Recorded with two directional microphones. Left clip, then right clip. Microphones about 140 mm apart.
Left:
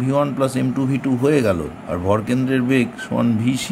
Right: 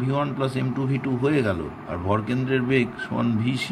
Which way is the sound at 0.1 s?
50° left (ahead or behind).